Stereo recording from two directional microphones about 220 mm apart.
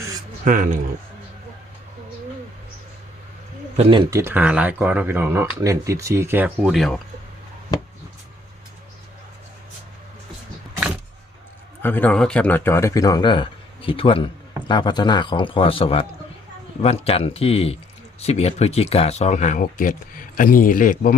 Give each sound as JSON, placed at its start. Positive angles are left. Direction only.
{"t": 0.4, "sound": "speech", "side_deg": -40}
{"t": 3.8, "sound": "speech", "side_deg": -25}
{"t": 7.7, "sound": "speech", "side_deg": 15}
{"t": 11.8, "sound": "a man's voice", "side_deg": 10}